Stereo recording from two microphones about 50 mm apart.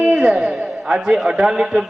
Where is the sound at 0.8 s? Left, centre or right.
Centre.